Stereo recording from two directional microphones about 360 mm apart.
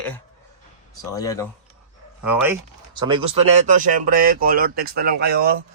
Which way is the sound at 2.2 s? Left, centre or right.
Centre.